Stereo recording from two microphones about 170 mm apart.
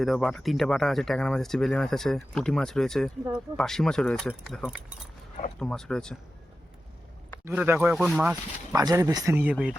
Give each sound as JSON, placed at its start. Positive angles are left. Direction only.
{"t": 0.0, "sound": "speech", "side_deg": 0}
{"t": 7.4, "sound": "speech", "side_deg": -10}
{"t": 8.7, "sound": "speech", "side_deg": -20}